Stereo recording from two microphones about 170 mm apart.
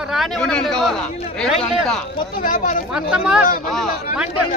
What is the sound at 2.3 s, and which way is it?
Speech, 50° left (ahead or behind).